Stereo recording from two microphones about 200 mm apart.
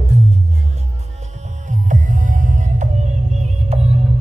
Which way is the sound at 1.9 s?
40° right (ahead or behind).